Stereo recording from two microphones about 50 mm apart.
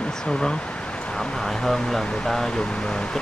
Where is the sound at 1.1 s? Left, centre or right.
Centre.